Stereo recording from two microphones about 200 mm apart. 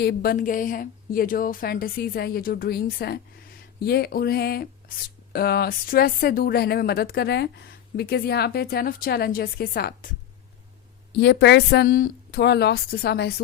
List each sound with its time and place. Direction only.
0.0 s speech: 50° left (ahead or behind)
11.2 s a woman's voice: 60° left (ahead or behind)